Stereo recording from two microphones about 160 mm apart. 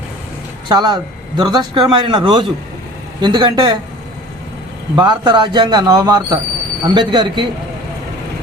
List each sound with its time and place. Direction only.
0.7 s speech: 30° right (ahead or behind)
4.9 s speech: 25° right (ahead or behind)